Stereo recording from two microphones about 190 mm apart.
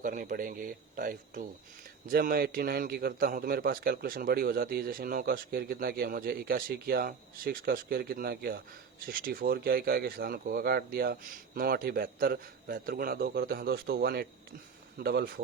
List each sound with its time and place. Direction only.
0.0 s a man's voice: 45° right (ahead or behind)